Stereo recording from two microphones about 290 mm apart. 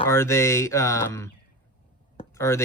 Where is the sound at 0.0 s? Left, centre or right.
Centre.